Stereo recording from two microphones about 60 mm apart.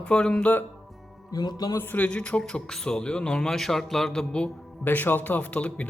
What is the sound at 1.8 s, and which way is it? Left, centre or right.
Speech, left.